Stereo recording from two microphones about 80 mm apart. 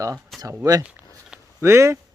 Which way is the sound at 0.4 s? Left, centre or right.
Right.